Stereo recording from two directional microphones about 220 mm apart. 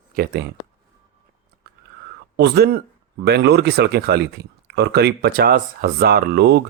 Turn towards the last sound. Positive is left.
turn(degrees=-50)  # may be behind; listen again after turning